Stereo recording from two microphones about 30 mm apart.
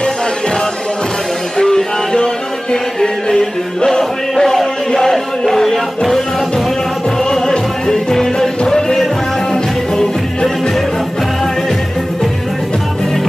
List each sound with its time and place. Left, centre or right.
1.6 s music: left
7.2 s music: centre